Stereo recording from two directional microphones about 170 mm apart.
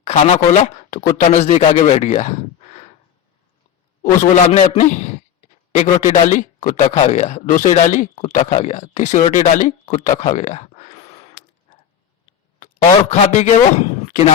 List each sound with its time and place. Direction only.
0.0 s speech: 40° left (ahead or behind)
4.2 s speech: 45° left (ahead or behind)
12.5 s speech: 45° left (ahead or behind)